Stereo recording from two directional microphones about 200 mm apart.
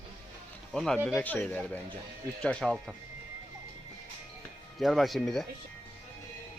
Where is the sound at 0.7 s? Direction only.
Centre (ahead or behind).